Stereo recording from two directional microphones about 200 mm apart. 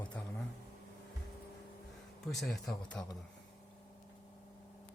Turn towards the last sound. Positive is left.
turn(degrees=0)  # may be behind; listen again after turning